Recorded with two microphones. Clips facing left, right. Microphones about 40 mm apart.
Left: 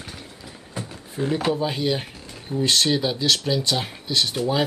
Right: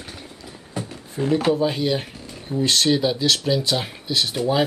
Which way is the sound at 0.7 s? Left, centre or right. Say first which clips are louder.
Right 2 dB; centre.